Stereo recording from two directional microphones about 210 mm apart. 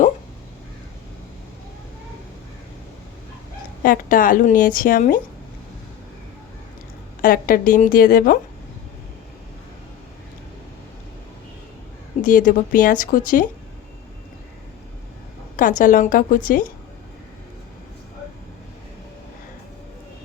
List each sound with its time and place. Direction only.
3.8 s a woman's voice: 40° left (ahead or behind)
7.2 s a woman's voice: 45° left (ahead or behind)
12.2 s a woman's voice: 40° left (ahead or behind)
15.8 s a woman's voice: 40° left (ahead or behind)